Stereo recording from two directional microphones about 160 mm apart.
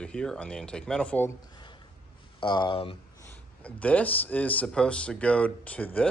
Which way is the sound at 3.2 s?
10° left (ahead or behind).